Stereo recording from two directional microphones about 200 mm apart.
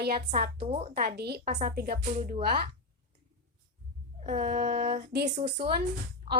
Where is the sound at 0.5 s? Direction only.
30° right (ahead or behind).